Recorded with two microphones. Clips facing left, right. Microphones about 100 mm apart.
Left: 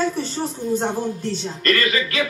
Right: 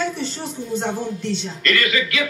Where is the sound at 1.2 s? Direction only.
40° left (ahead or behind).